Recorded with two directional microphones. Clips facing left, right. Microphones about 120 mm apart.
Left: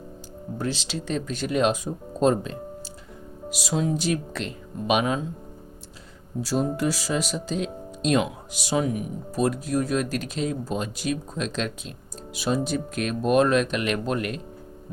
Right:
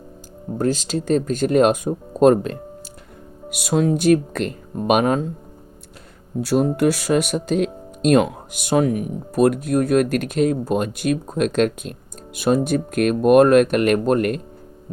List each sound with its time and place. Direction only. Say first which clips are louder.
0.6 s speech: right 9 dB; 45° right (ahead or behind)
6.4 s speech: right 7 dB; 60° right (ahead or behind)